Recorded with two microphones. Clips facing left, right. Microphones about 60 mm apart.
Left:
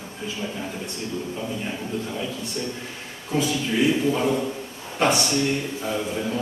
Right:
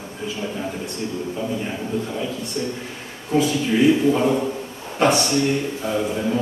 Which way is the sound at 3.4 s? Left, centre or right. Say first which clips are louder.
Right 4 dB; centre.